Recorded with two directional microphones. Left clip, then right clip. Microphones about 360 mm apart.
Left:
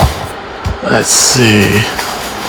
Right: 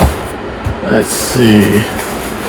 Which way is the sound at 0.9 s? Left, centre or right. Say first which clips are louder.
Left 3 dB; centre.